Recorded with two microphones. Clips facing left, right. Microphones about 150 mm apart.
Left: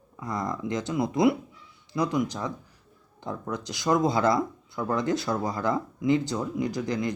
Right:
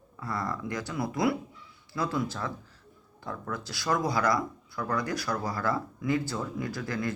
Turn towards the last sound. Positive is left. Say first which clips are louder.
# left 4 dB
turn(degrees=20)  # may be behind; listen again after turning